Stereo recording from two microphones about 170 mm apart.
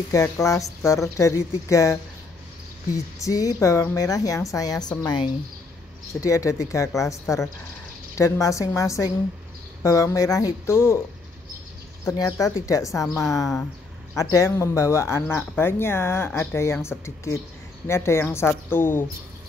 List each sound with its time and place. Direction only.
0.1 s a woman's voice: 20° left (ahead or behind)
3.2 s a woman's voice: 20° left (ahead or behind)
12.0 s a woman's voice: 20° left (ahead or behind)
14.1 s speech: 20° left (ahead or behind)